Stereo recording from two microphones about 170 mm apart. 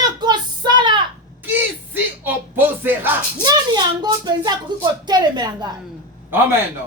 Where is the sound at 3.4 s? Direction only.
25° right (ahead or behind).